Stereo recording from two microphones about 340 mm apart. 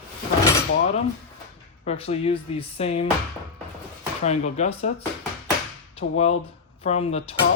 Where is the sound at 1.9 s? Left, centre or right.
Centre.